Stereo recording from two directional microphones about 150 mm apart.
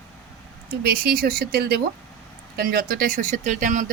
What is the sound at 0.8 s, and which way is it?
Speech, 90° right.